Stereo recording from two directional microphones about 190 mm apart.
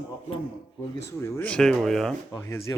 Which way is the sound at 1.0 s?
15° left (ahead or behind).